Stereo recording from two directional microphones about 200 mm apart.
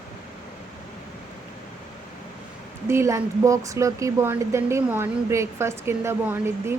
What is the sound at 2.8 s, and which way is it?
A woman's voice, 15° right (ahead or behind).